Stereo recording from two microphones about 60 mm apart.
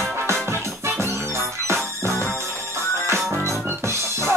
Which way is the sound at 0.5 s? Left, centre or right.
Right.